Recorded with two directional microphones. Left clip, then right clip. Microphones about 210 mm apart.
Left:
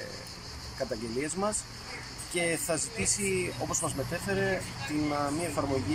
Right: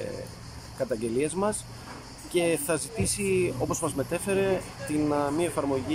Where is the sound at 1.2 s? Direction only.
10° right (ahead or behind).